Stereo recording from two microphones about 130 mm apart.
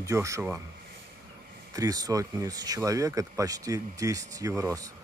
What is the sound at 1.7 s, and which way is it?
Speech, 25° right (ahead or behind).